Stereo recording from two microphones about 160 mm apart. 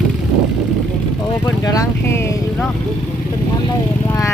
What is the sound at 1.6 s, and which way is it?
Speech, 20° left (ahead or behind).